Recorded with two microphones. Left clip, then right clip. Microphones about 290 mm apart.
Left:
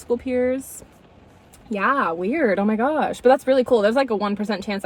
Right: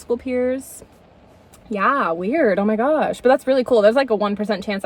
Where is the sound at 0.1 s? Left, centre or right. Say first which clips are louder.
Right 1 dB; centre.